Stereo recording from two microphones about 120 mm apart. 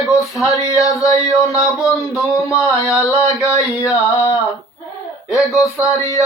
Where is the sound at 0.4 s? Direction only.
25° left (ahead or behind).